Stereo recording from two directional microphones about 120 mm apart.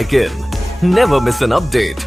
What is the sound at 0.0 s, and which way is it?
Speech, centre (ahead or behind).